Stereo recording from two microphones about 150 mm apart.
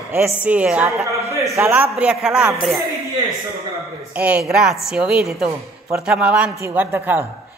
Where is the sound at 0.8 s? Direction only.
20° right (ahead or behind).